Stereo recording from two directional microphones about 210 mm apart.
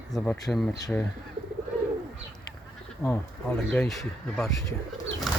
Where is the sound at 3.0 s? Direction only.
10° left (ahead or behind).